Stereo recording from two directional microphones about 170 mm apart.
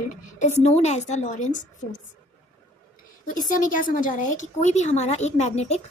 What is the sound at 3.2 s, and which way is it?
Speech, 50° left (ahead or behind).